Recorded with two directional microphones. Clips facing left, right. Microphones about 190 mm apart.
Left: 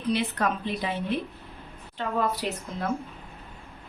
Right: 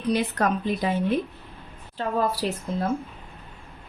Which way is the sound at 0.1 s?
45° right (ahead or behind).